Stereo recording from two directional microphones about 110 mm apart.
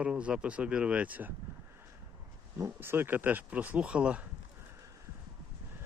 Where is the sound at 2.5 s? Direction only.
25° right (ahead or behind); by 4.2 s 10° right (ahead or behind).